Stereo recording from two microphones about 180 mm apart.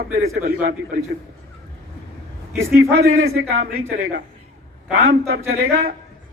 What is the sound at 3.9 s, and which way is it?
A man's voice, 55° right (ahead or behind).